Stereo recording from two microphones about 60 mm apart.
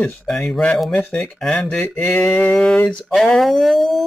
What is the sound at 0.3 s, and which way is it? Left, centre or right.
Speech, centre.